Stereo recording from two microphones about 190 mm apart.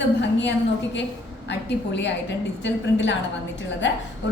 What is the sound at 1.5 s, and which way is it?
A woman's voice, 65° left (ahead or behind).